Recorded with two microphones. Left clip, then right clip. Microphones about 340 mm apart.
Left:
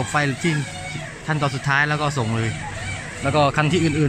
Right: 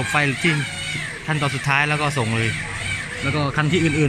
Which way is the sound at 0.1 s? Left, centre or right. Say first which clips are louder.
Right 3 dB; centre.